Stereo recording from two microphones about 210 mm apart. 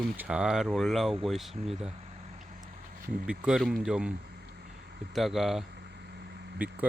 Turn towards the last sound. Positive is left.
turn(degrees=-5)  # may be behind; listen again after turning